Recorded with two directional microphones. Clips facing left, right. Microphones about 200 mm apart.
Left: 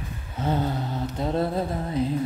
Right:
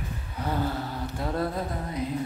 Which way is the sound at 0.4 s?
20° left (ahead or behind).